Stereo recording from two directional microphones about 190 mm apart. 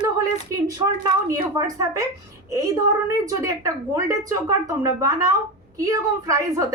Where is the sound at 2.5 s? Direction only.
15° right (ahead or behind).